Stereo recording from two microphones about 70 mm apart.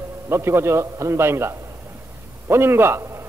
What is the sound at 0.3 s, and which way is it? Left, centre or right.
A man's voice, right.